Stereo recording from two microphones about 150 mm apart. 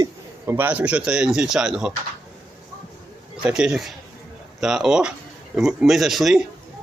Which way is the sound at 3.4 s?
5° right (ahead or behind).